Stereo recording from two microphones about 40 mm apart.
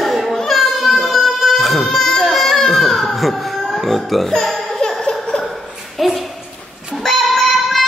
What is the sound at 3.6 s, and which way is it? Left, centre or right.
Music, centre.